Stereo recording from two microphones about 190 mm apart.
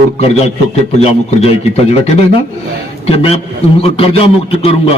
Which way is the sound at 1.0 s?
30° left (ahead or behind).